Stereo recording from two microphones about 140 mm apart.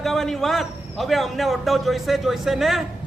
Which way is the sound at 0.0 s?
5° left (ahead or behind).